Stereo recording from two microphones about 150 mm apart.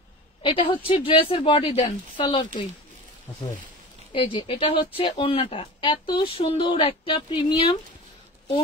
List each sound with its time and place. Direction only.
0.4 s a woman's voice: 35° left (ahead or behind)
4.1 s speech: 35° left (ahead or behind)